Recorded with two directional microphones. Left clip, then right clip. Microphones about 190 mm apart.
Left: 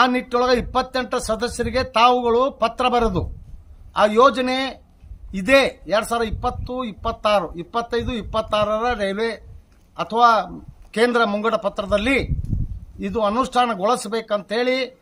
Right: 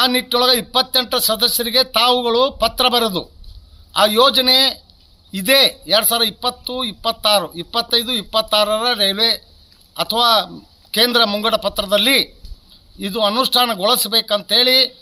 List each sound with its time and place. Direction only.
0.0 s speech: 10° left (ahead or behind)